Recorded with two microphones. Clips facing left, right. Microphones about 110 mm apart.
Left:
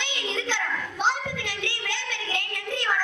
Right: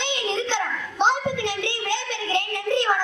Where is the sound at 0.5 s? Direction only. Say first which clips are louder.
Right 3 dB; 20° right (ahead or behind).